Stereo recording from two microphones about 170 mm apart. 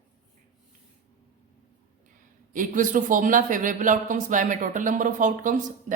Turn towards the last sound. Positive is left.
turn(degrees=-50)  # may be behind; listen again after turning